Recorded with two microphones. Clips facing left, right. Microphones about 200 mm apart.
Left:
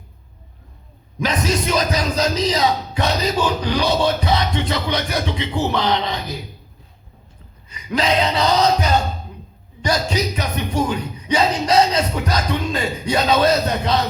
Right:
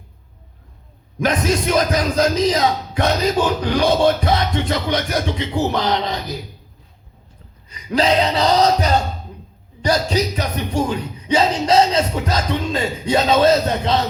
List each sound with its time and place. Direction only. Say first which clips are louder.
1.2 s speech: right 2 dB; 50° right (ahead or behind)
7.7 s speech: right 3 dB; 35° right (ahead or behind)